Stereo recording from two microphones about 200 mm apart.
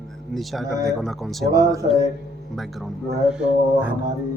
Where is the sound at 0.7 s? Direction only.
15° right (ahead or behind).